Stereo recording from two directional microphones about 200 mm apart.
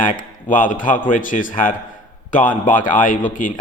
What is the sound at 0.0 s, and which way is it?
Speech, 40° left (ahead or behind).